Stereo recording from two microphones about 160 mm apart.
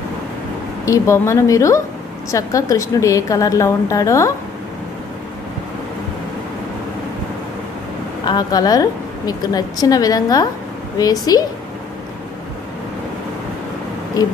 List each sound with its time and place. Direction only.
0.8 s a woman's voice: 20° left (ahead or behind)
8.3 s a woman's voice: 25° left (ahead or behind)